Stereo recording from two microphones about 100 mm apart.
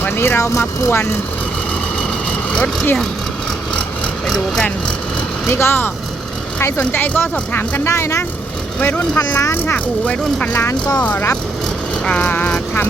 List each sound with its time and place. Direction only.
0.0 s speech: 25° left (ahead or behind)
2.5 s speech: 15° left (ahead or behind)
5.5 s speech: 25° left (ahead or behind)
7.9 s speech: 25° left (ahead or behind); by 10.6 s 10° left (ahead or behind)
10.6 s speech: 20° left (ahead or behind)